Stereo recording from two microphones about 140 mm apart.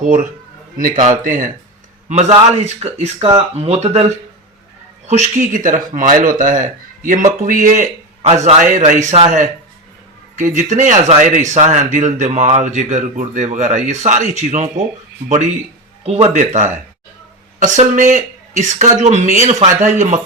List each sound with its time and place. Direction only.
0.0 s speech: 70° right (ahead or behind)
2.0 s speech: 55° right (ahead or behind)
5.0 s speech: 55° right (ahead or behind)
16.0 s speech: 50° right (ahead or behind)